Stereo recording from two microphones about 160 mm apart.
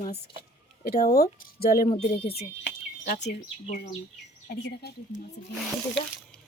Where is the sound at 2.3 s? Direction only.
85° left.